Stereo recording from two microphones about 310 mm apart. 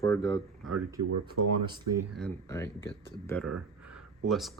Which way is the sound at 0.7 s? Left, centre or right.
Right.